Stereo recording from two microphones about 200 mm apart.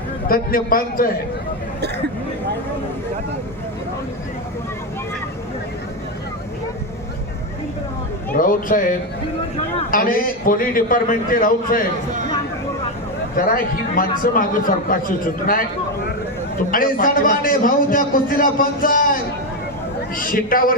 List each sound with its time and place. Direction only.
0.3 s a man's voice: 45° left (ahead or behind)
8.3 s a man's voice: 45° left (ahead or behind)
13.4 s a man's voice: 45° left (ahead or behind)
16.7 s a man's voice: 45° left (ahead or behind)
20.1 s a man's voice: 45° left (ahead or behind)